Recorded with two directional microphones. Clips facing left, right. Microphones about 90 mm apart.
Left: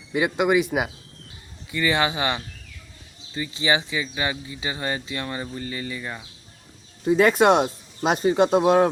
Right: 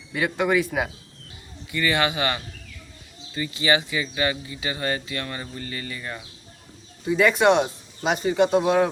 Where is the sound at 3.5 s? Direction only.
25° left (ahead or behind).